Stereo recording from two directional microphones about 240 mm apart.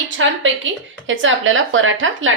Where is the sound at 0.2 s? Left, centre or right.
Right.